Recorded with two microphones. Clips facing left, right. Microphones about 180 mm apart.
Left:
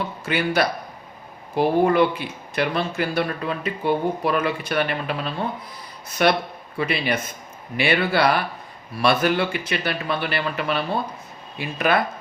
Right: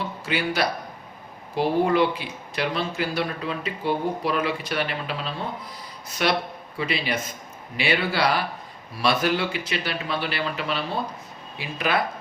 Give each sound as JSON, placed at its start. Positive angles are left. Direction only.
{"t": 0.3, "sound": "speech", "side_deg": 55}